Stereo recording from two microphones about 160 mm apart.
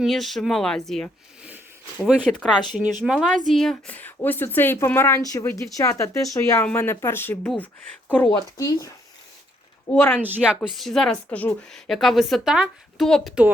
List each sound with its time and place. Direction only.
0.0 s speech: centre (ahead or behind)
2.3 s a woman's voice: centre (ahead or behind); by 8.9 s 20° left (ahead or behind)
10.2 s speech: 10° right (ahead or behind)